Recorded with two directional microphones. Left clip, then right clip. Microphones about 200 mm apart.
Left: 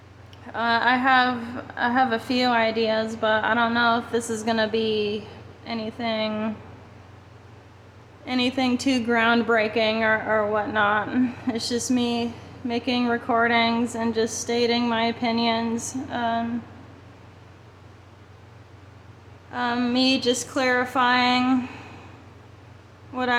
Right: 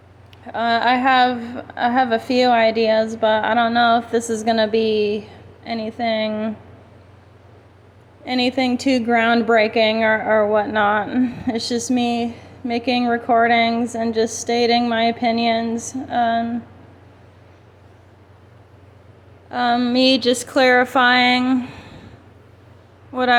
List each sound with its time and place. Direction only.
0.4 s a woman's voice: 15° right (ahead or behind)
8.2 s a woman's voice: 20° right (ahead or behind)
19.5 s a woman's voice: 25° right (ahead or behind)
23.1 s a woman's voice: 15° right (ahead or behind)